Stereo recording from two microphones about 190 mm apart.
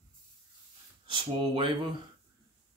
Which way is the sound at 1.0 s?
25° right (ahead or behind).